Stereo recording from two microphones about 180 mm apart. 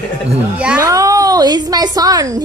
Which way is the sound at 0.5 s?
10° right (ahead or behind).